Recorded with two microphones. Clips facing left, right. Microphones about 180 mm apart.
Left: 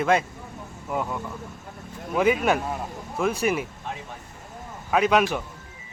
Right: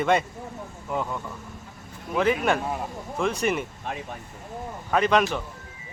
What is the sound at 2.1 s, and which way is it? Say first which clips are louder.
Speech: left 1 dB; 5° left (ahead or behind).